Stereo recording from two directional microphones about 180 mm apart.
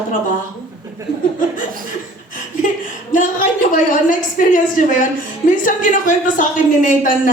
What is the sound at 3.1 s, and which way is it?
A woman's voice, 45° left (ahead or behind).